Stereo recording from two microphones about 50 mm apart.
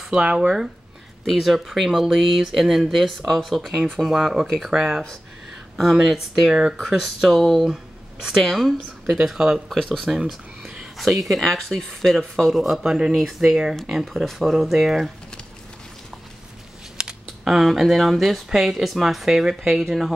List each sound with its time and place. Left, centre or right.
0.1 s speech: right
1.3 s speech: centre
7.6 s a sound: centre
8.4 s speech: centre
9.1 s speech: centre
9.7 s speech: centre
10.0 s a sound: centre
11.0 s speech: centre
12.8 s speech: centre
17.0 s scissors: centre
17.5 s speech: centre